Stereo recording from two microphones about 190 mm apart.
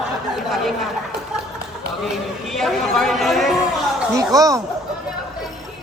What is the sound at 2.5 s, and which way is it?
Chatter, centre (ahead or behind).